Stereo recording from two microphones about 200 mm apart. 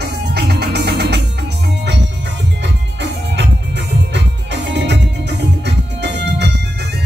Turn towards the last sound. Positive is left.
turn(degrees=-60)  # may be behind; listen again after turning